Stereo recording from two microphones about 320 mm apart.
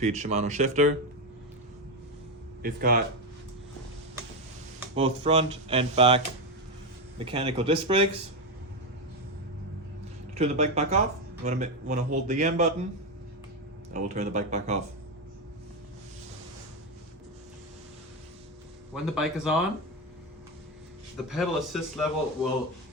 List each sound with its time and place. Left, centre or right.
0.0 s a man's voice: right
2.6 s a man's voice: right
4.9 s speech: centre
7.3 s speech: centre
10.3 s a man's voice: right
13.9 s a man's voice: right
19.1 s a man's voice: centre
21.2 s a man's voice: centre